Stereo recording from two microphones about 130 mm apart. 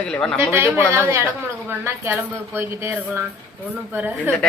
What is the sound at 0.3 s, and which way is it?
A woman's voice, 20° right (ahead or behind).